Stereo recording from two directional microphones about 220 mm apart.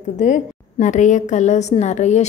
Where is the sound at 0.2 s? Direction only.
35° left (ahead or behind).